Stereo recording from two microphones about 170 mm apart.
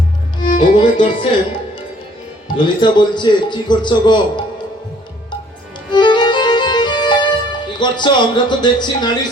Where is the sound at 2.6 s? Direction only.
25° left (ahead or behind).